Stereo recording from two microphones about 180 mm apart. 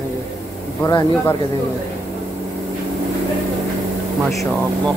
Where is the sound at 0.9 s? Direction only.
25° left (ahead or behind).